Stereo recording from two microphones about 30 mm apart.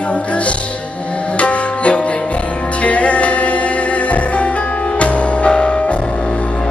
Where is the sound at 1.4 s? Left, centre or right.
Left.